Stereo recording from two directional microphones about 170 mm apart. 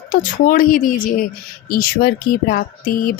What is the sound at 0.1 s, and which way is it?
A woman's voice, 55° left (ahead or behind).